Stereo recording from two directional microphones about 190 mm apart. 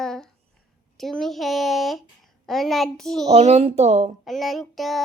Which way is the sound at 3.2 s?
35° right (ahead or behind).